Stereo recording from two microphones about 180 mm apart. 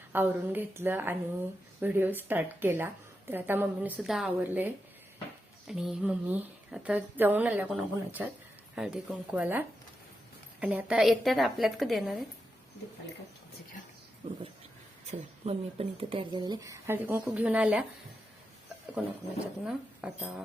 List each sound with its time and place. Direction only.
0.1 s a woman's voice: 10° right (ahead or behind)
15.0 s a woman's voice: 35° right (ahead or behind); by 17.8 s 5° right (ahead or behind)
19.6 s a woman's voice: 5° right (ahead or behind)